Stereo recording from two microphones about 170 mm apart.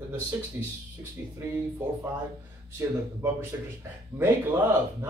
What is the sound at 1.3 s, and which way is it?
Speech, 15° right (ahead or behind).